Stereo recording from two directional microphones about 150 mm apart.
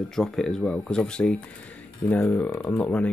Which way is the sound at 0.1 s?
5° left (ahead or behind).